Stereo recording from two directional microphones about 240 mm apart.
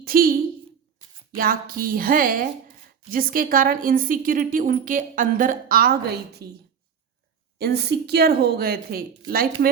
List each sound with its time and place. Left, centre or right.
0.0 s a sound: right
1.4 s speech: right
7.6 s speech: right